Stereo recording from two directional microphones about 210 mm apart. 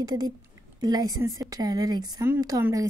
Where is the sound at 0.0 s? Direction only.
20° right (ahead or behind).